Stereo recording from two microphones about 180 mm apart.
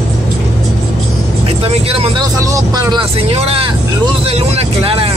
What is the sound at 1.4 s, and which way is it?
Speech, 35° right (ahead or behind).